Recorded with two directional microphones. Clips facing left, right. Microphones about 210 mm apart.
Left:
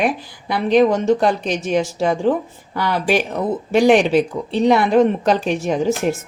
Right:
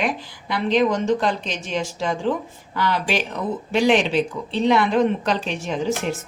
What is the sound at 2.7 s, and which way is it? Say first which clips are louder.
Speech: left 4 dB; 45° left (ahead or behind).